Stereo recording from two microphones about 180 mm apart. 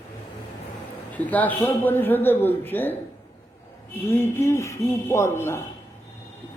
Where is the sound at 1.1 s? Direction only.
10° left (ahead or behind).